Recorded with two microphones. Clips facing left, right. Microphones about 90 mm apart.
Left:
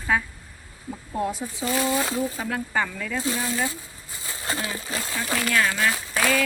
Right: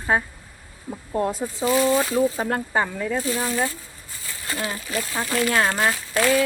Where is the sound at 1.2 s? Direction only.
40° right (ahead or behind).